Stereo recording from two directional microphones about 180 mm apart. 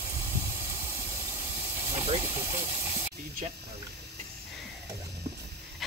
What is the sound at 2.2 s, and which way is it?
Speech, 10° right (ahead or behind).